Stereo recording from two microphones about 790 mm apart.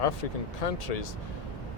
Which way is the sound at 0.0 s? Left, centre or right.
Left.